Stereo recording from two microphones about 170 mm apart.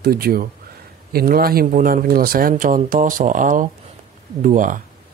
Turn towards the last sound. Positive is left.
turn(degrees=-50)  # may be behind; listen again after turning